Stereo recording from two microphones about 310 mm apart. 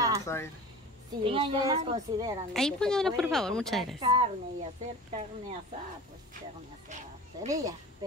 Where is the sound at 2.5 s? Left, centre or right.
Centre.